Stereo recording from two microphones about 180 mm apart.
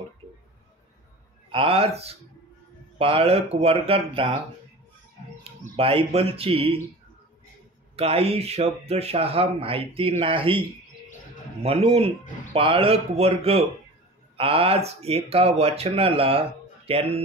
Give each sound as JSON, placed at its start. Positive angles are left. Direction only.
{"t": 1.5, "sound": "speech", "side_deg": -30}
{"t": 5.8, "sound": "speech", "side_deg": -30}
{"t": 7.9, "sound": "speech", "side_deg": -35}